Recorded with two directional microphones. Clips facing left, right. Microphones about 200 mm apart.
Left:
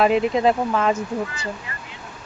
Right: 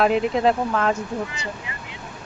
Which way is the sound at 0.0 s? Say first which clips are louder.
Left 1 dB; centre (ahead or behind).